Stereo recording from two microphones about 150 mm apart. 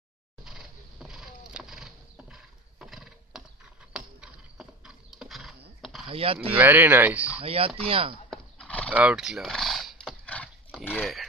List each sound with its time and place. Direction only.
0.5 s a sound: 5° right (ahead or behind)
3.9 s horse: 5° right (ahead or behind)
5.8 s a sound: centre (ahead or behind)
6.0 s speech: 40° right (ahead or behind)
6.6 s speech: 15° right (ahead or behind)
7.3 s speech: 40° right (ahead or behind)
8.3 s horse: 5° left (ahead or behind)
8.9 s horse: 5° right (ahead or behind)
11.0 s speech: centre (ahead or behind)